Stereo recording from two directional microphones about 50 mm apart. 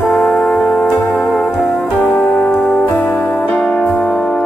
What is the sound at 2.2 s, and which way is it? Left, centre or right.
Music, left.